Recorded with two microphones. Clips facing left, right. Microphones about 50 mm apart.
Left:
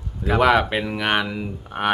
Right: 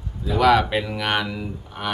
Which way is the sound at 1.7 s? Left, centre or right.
Left.